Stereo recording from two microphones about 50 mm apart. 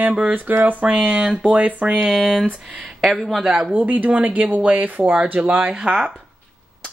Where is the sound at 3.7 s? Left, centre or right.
Right.